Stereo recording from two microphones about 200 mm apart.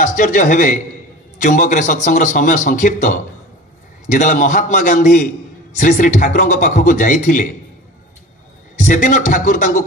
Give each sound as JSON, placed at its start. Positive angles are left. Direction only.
{"t": 0.0, "sound": "a man's voice", "side_deg": 40}
{"t": 8.7, "sound": "a man's voice", "side_deg": 40}